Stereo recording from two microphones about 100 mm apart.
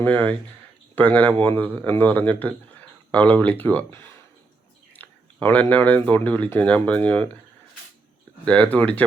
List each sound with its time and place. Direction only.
0.0 s speech: 15° left (ahead or behind)
4.9 s speech: 15° left (ahead or behind)
8.4 s speech: 15° left (ahead or behind)